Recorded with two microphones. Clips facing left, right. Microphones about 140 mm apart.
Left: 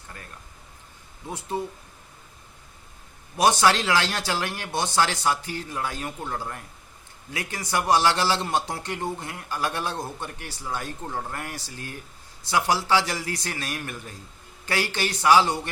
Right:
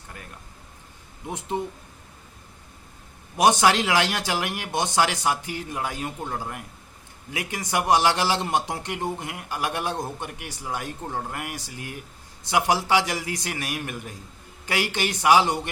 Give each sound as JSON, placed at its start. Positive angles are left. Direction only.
{"t": 1.3, "sound": "speech", "side_deg": -20}
{"t": 3.3, "sound": "a man's voice", "side_deg": -15}